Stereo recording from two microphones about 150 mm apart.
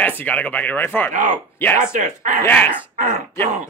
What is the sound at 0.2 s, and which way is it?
Speech, 10° left (ahead or behind).